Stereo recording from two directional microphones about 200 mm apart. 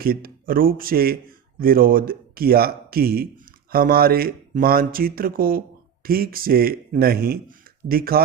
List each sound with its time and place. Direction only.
0.0 s speech: 50° right (ahead or behind)